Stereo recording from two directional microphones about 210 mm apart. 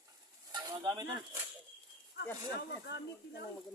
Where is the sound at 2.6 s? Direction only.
55° left (ahead or behind).